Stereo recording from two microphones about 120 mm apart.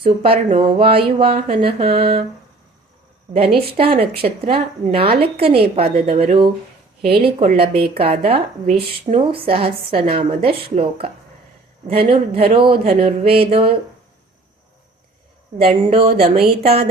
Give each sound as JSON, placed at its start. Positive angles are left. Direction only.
{"t": 0.0, "sound": "speech", "side_deg": -50}
{"t": 3.3, "sound": "speech", "side_deg": -50}
{"t": 9.1, "sound": "speech", "side_deg": -50}
{"t": 11.9, "sound": "speech", "side_deg": -50}
{"t": 15.6, "sound": "speech", "side_deg": -50}